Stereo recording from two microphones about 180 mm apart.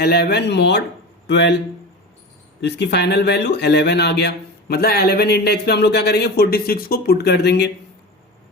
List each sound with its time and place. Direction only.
0.0 s speech: 65° left (ahead or behind)
2.6 s speech: 70° left (ahead or behind)